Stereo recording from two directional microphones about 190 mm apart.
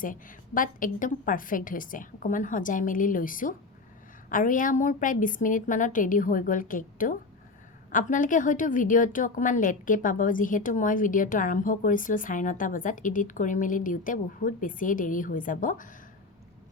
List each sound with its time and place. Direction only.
0.0 s a woman's voice: 45° left (ahead or behind)